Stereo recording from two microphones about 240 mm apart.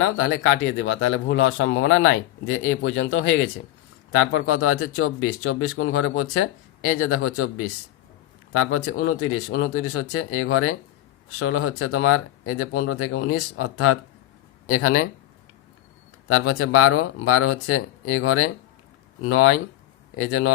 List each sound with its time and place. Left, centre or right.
0.0 s a man's voice: left
8.7 s speech: left
16.3 s speech: left